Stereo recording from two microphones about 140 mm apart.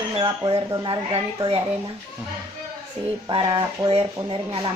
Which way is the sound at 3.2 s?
35° right (ahead or behind).